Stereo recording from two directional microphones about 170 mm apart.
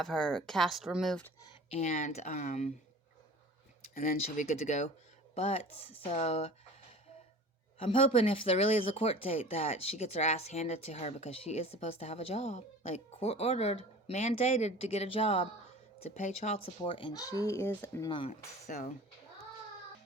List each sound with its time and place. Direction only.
0.0 s speech: 5° left (ahead or behind)
1.7 s speech: 40° left (ahead or behind)
4.0 s speech: 45° left (ahead or behind)
7.8 s speech: 35° left (ahead or behind); by 18.1 s 15° left (ahead or behind)
18.1 s speech: 30° left (ahead or behind)
18.7 s speech: 50° left (ahead or behind)